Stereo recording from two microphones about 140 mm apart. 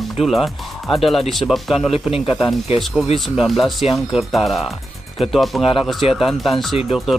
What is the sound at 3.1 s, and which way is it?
Speech, centre (ahead or behind).